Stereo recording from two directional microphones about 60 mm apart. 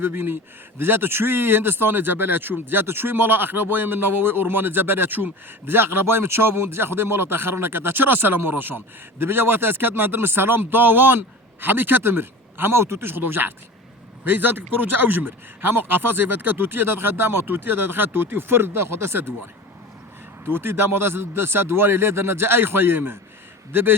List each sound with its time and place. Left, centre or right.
0.0 s speech: right
20.4 s speech: right